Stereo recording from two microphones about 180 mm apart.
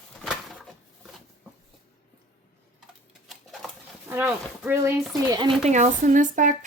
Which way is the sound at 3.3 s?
Centre (ahead or behind).